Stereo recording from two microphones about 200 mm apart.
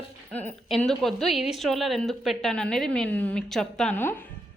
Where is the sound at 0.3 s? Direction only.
5° left (ahead or behind).